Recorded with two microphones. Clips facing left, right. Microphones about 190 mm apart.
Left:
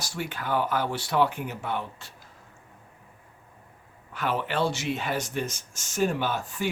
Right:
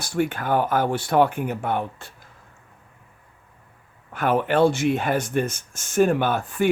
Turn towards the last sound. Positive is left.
turn(degrees=-55)  # may be behind; listen again after turning